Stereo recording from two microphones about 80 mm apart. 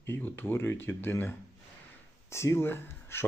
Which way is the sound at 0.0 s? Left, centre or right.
Left.